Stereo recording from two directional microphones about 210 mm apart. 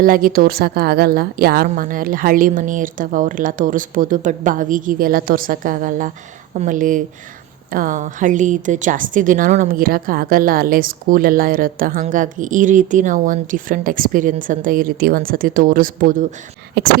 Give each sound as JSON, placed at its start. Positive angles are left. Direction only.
{"t": 0.0, "sound": "a woman's voice", "side_deg": -40}
{"t": 16.8, "sound": "speech", "side_deg": -50}